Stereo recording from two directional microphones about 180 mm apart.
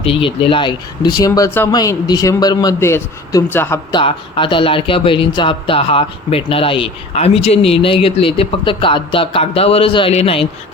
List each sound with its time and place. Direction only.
0.0 s speech: 30° left (ahead or behind); by 3.8 s 10° left (ahead or behind)
3.9 s speech: 30° left (ahead or behind)